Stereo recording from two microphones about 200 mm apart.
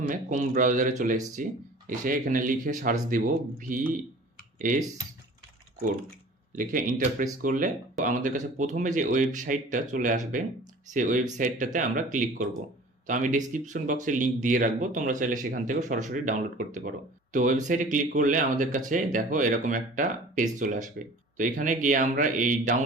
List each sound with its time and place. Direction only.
0.1 s speech: 40° right (ahead or behind)
6.6 s speech: 40° right (ahead or behind)